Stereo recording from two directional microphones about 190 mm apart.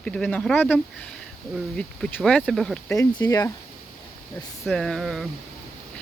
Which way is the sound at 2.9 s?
20° left (ahead or behind).